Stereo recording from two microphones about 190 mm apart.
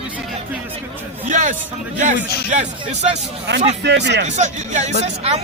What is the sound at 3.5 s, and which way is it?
Speech, 65° right (ahead or behind).